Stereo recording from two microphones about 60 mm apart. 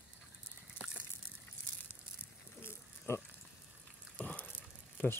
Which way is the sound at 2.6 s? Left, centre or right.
Left.